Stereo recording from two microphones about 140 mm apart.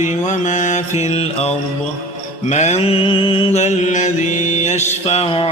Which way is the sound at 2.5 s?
55° left (ahead or behind).